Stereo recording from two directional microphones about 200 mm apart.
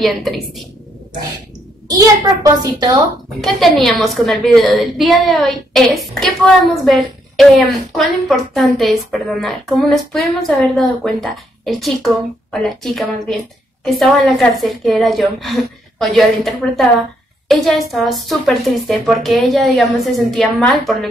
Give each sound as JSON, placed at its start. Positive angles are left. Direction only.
{"t": 0.0, "sound": "a woman's voice", "side_deg": 0}
{"t": 1.9, "sound": "a woman's voice", "side_deg": -15}
{"t": 3.3, "sound": "a woman's voice", "side_deg": 0}